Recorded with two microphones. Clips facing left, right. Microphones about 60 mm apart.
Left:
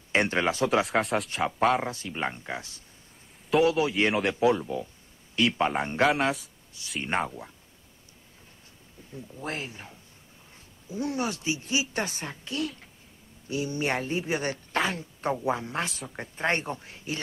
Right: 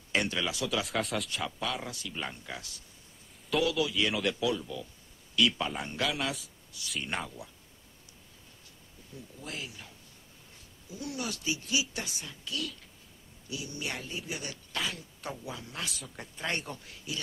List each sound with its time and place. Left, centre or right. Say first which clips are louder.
0.1 s speech: left 6 dB; left
1.3 s speech: left 10 dB; left
1.9 s speech: left 7 dB; left
9.4 s speech: left 7 dB; left